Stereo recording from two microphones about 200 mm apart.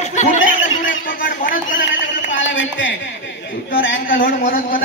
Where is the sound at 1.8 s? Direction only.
65° left (ahead or behind).